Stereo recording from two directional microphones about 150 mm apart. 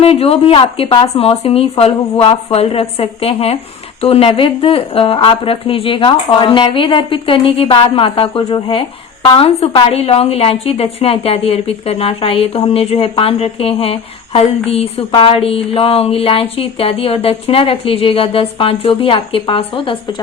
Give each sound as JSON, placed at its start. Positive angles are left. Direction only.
{"t": 0.0, "sound": "a woman's voice", "side_deg": 40}